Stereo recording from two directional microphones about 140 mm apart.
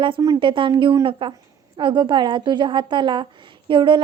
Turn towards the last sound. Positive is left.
turn(degrees=-35)  # may be behind; listen again after turning